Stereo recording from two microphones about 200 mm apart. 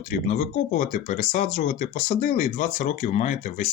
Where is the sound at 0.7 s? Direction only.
35° left (ahead or behind).